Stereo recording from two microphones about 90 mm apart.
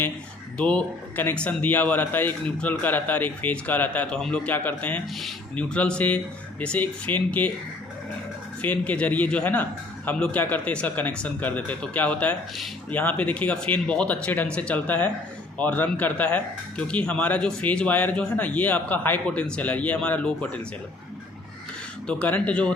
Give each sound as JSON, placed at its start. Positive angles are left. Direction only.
{"t": 0.6, "sound": "speech", "side_deg": 10}
{"t": 8.6, "sound": "speech", "side_deg": 15}
{"t": 22.0, "sound": "speech", "side_deg": 15}